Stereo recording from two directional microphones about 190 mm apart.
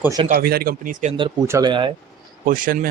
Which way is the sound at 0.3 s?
55° right (ahead or behind).